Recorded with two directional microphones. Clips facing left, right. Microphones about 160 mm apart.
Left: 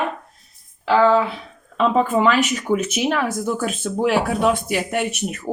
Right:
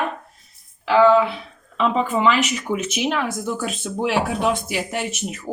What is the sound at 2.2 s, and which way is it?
Speech, 45° left (ahead or behind).